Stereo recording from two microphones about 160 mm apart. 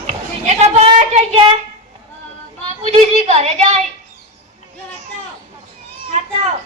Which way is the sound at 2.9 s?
45° right (ahead or behind).